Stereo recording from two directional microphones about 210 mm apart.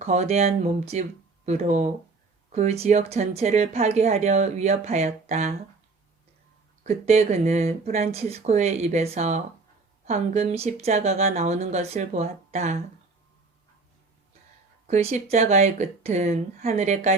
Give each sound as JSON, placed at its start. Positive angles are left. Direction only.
{"t": 0.0, "sound": "a woman's voice", "side_deg": -30}
{"t": 6.8, "sound": "a woman's voice", "side_deg": -30}
{"t": 14.8, "sound": "a woman's voice", "side_deg": -35}